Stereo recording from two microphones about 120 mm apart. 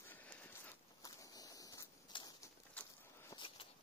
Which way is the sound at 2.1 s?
45° left (ahead or behind).